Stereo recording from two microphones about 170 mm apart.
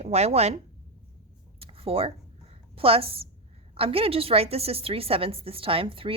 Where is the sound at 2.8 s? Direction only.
35° right (ahead or behind).